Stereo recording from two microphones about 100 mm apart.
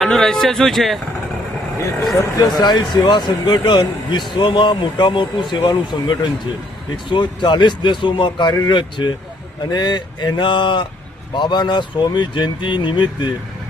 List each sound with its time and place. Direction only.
0.0 s speech: 5° left (ahead or behind)
2.1 s speech: 40° left (ahead or behind)